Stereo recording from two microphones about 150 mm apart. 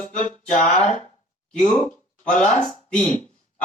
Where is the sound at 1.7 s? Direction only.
5° left (ahead or behind).